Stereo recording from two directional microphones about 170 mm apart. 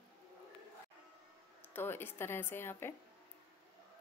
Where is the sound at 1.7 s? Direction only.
15° left (ahead or behind).